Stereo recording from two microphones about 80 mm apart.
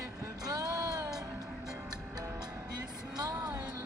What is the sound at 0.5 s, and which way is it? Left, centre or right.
Music, right.